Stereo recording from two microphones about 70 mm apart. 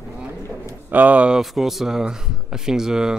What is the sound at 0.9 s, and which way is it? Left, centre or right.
A man's voice, right.